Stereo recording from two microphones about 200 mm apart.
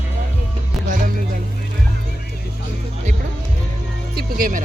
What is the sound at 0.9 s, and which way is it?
Music, 40° right (ahead or behind).